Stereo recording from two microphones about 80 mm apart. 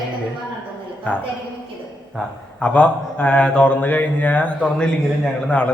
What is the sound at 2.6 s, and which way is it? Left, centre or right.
Speech, centre.